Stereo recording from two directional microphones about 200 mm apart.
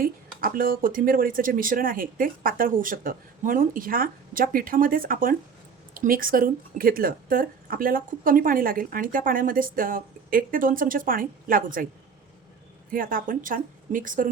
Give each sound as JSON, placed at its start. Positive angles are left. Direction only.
{"t": 0.0, "sound": "speech", "side_deg": -45}
{"t": 12.9, "sound": "speech", "side_deg": -45}